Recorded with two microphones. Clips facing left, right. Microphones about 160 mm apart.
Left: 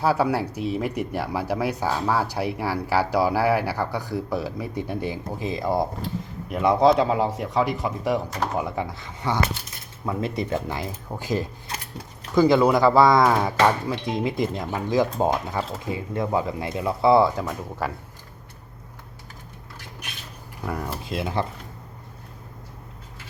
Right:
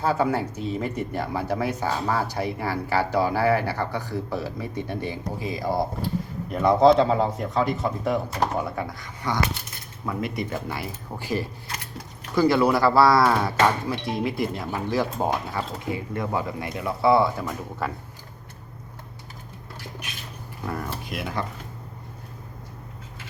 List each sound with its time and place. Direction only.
0.0 s speech: 10° left (ahead or behind)
6.5 s speech: 10° left (ahead or behind); by 17.2 s 25° left (ahead or behind)
17.4 s speech: 10° left (ahead or behind)
20.7 s speech: 20° left (ahead or behind)